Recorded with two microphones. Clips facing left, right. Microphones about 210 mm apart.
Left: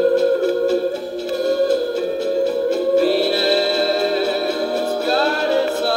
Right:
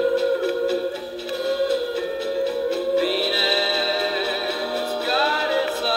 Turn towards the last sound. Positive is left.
turn(degrees=45)  # may be behind; listen again after turning